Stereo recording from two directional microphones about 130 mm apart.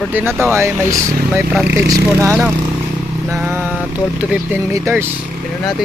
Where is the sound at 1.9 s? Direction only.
25° right (ahead or behind).